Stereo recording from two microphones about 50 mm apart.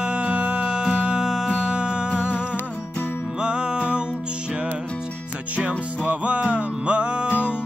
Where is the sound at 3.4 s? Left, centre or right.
Centre.